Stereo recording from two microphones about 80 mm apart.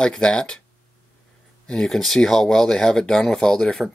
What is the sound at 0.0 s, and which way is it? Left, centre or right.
Speech, centre.